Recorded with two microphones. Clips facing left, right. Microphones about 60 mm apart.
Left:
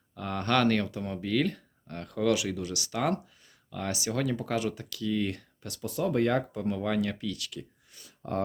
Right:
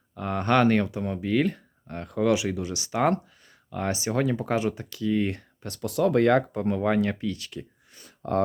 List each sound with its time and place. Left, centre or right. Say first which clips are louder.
0.2 s speech: right 4 dB; right
5.8 s speech: right 6 dB; right
6.5 s speech: right 5 dB; right
8.2 s speech: right 6 dB; right